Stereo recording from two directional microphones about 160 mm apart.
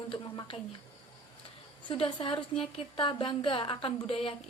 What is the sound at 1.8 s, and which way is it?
A woman's voice, 30° left (ahead or behind).